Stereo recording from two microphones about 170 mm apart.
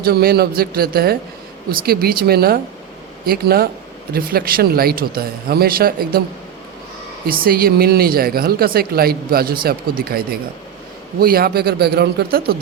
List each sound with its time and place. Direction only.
0.0 s speech: 65° right (ahead or behind)
7.3 s a man's voice: 60° right (ahead or behind)